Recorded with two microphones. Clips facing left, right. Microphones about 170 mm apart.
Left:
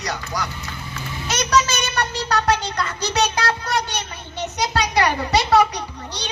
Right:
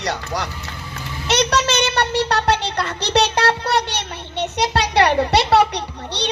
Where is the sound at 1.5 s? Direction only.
70° right (ahead or behind).